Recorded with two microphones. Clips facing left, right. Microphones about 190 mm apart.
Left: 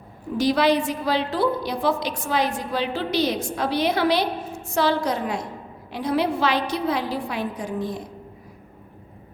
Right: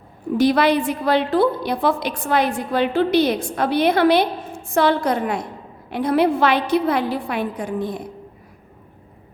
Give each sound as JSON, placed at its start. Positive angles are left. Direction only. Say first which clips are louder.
{"t": 0.3, "sound": "a woman's voice", "louder": "right 3 dB", "side_deg": -55}